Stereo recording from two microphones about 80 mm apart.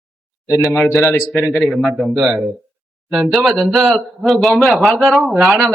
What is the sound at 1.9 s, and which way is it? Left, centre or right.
A man's voice, centre.